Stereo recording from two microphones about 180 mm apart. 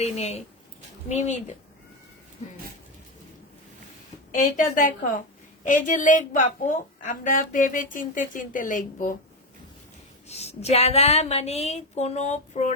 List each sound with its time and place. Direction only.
0.0 s a woman's voice: 35° left (ahead or behind)
4.3 s a woman's voice: 45° left (ahead or behind)
10.2 s a woman's voice: 35° left (ahead or behind)